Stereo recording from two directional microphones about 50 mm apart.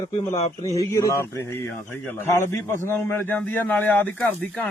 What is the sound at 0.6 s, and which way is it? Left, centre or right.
Speech, left.